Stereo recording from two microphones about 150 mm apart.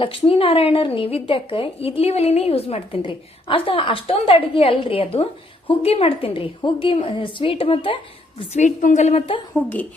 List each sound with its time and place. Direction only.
0.0 s a woman's voice: 35° left (ahead or behind)
8.4 s a woman's voice: 50° left (ahead or behind)